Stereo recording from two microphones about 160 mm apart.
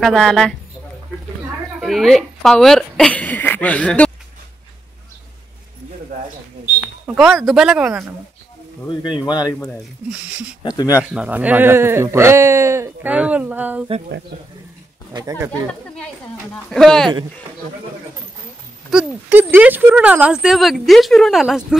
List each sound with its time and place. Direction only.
0.0 s speech: centre (ahead or behind)
1.8 s speech: centre (ahead or behind)
7.1 s speech: centre (ahead or behind)
8.8 s speech: 30° left (ahead or behind)
10.1 s speech: 10° right (ahead or behind)
10.6 s speech: 25° left (ahead or behind)
11.1 s speech: 10° right (ahead or behind)
15.1 s speech: 20° right (ahead or behind)
16.6 s speech: centre (ahead or behind)
18.9 s speech: 10° right (ahead or behind)